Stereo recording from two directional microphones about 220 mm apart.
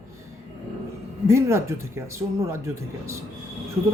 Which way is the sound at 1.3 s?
15° right (ahead or behind).